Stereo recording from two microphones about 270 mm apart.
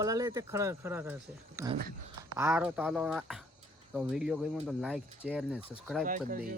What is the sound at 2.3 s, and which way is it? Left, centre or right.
Speech, centre.